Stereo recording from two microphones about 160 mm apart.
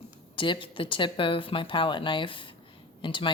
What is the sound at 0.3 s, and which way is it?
Speech, 30° left (ahead or behind).